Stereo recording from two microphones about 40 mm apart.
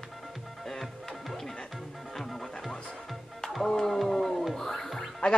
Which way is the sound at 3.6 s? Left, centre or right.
Centre.